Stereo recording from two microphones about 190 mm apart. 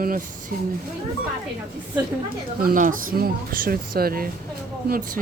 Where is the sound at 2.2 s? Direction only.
50° right (ahead or behind).